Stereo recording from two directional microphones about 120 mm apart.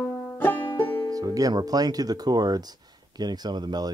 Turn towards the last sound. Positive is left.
turn(degrees=-35)  # may be behind; listen again after turning